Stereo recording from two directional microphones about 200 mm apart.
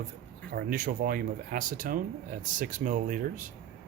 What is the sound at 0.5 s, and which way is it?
Speech, 45° right (ahead or behind).